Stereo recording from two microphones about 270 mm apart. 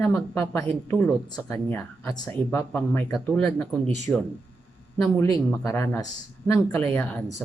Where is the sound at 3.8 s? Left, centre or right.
Right.